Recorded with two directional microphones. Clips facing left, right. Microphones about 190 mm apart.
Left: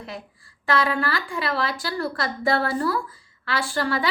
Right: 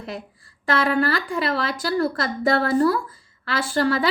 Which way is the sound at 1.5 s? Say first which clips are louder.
Even; 40° right (ahead or behind).